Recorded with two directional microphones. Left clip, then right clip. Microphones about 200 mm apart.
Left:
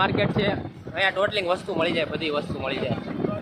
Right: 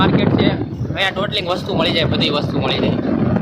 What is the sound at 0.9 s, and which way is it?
Speech, 15° right (ahead or behind).